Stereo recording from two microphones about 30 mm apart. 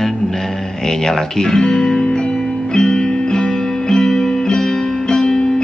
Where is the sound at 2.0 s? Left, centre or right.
Left.